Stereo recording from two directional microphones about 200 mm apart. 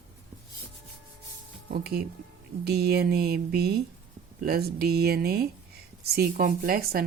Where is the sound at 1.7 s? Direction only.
50° right (ahead or behind).